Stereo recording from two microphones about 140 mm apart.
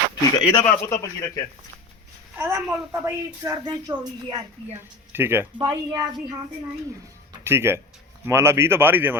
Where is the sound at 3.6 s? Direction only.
30° right (ahead or behind).